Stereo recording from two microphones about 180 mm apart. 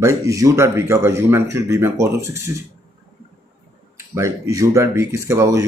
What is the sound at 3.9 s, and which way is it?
Speech, 15° right (ahead or behind).